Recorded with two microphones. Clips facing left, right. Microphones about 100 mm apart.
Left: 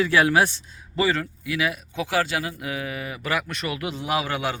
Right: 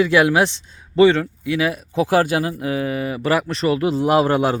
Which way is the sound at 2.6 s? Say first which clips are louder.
Right 8 dB; 30° right (ahead or behind).